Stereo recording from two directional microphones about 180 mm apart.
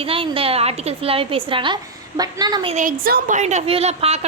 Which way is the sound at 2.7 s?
50° right (ahead or behind).